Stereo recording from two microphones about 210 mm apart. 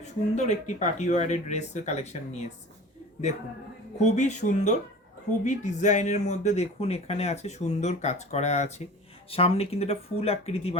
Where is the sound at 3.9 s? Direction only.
35° left (ahead or behind).